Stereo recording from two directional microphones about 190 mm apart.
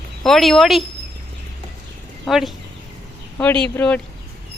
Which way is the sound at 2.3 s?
Centre (ahead or behind).